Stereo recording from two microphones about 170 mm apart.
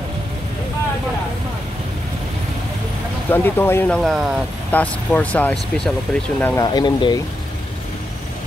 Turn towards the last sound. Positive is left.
turn(degrees=25)  # may be behind; listen again after turning